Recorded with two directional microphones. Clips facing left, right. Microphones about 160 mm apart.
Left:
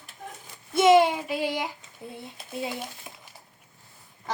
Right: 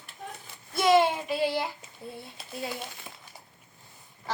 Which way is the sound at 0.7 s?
20° left (ahead or behind).